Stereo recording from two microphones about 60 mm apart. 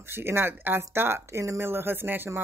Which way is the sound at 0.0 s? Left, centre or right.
Right.